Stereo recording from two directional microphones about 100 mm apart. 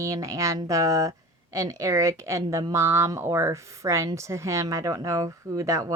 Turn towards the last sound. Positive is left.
turn(degrees=-30)  # may be behind; listen again after turning